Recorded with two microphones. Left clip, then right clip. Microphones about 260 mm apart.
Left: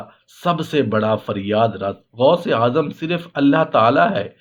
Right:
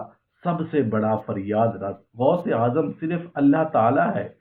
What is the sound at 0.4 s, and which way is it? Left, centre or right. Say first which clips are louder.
Speech: left 5 dB; left.